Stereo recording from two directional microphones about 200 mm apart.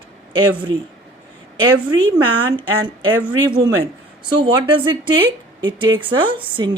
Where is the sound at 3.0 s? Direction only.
90° right.